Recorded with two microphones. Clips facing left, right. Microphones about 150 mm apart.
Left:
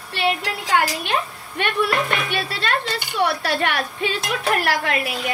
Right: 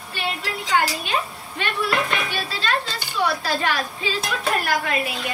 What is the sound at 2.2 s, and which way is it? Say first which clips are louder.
A woman's voice: left 2 dB; 60° left (ahead or behind).